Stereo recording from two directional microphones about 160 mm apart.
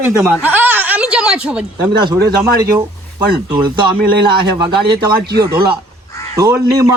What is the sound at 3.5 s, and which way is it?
A man's voice, 30° right (ahead or behind).